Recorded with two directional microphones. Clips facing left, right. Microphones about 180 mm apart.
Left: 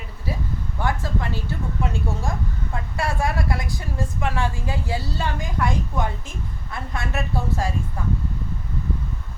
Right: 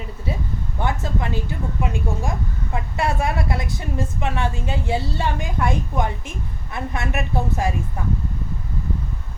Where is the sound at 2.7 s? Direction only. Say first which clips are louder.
Right 4 dB; 20° right (ahead or behind).